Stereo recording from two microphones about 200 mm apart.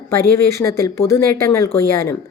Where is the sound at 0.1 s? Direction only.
15° left (ahead or behind).